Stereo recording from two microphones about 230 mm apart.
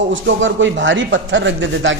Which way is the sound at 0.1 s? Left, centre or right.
Right.